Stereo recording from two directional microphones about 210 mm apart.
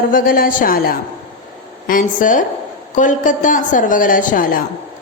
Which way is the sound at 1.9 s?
40° left (ahead or behind).